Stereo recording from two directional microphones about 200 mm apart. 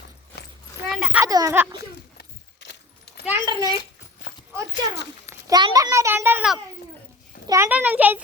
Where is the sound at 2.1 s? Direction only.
55° left (ahead or behind).